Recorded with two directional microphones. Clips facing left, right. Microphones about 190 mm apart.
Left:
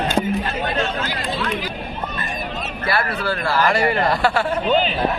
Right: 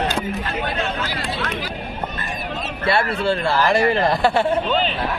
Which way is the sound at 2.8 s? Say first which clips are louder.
Right 3 dB; 25° right (ahead or behind).